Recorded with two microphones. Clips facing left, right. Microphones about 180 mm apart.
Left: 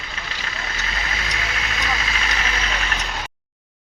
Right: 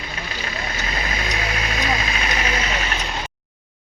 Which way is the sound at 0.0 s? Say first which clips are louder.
Right 4 dB; 20° right (ahead or behind).